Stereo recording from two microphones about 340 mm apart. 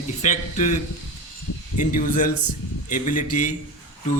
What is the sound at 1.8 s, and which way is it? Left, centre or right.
Speech, left.